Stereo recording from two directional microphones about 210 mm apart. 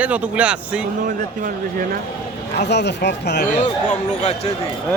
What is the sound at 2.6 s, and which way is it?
Speech, 55° left (ahead or behind).